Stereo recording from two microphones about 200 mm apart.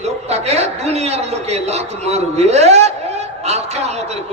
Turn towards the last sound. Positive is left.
turn(degrees=-35)  # may be behind; listen again after turning